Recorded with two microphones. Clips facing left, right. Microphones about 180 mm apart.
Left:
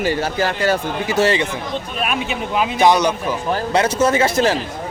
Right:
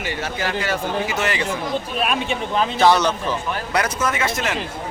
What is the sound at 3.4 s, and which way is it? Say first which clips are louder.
A man's voice: left 8 dB; 30° left (ahead or behind).